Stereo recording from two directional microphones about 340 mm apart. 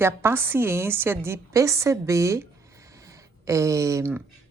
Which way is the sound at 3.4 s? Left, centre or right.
Centre.